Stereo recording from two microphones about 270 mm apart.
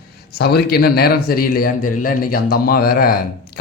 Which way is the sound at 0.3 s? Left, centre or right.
Left.